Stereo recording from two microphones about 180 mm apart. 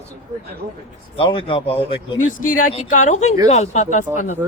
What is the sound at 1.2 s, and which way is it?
A man's voice, 30° left (ahead or behind).